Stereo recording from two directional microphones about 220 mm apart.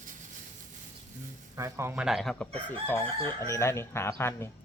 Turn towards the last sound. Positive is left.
turn(degrees=10)  # may be behind; listen again after turning